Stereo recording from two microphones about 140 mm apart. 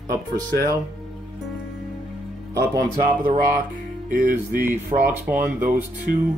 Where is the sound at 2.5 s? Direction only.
25° right (ahead or behind).